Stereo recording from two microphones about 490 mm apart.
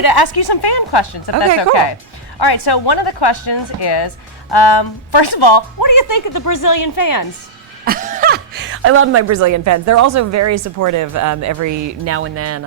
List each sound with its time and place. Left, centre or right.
0.0 s a woman's voice: left
7.9 s a woman's voice: centre